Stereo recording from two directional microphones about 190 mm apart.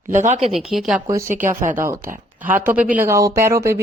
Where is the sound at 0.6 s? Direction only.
Centre (ahead or behind).